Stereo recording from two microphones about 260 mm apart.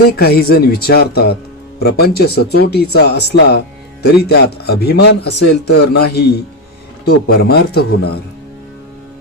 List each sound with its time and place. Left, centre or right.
0.2 s a man's voice: left